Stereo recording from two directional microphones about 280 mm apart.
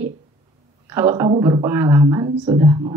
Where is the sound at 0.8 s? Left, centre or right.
Centre.